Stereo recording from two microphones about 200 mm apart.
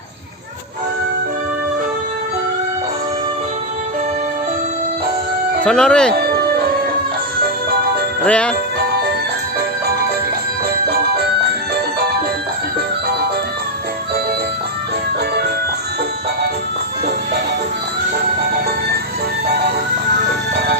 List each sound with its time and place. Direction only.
5.6 s speech: 5° left (ahead or behind)
8.2 s speech: 5° left (ahead or behind)
10.8 s music: 50° right (ahead or behind)
20.1 s music: 55° right (ahead or behind)